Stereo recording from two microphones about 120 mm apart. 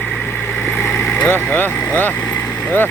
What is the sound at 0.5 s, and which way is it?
Vehicle, 15° left (ahead or behind).